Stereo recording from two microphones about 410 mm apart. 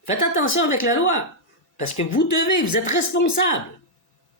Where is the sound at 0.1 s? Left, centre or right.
Left.